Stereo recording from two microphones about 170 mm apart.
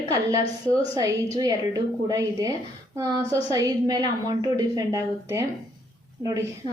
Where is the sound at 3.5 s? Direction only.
20° right (ahead or behind).